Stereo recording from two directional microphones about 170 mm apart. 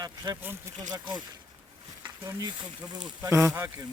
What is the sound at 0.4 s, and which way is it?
Speech, 20° right (ahead or behind).